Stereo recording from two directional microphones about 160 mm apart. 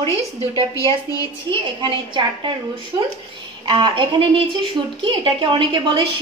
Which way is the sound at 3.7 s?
30° right (ahead or behind).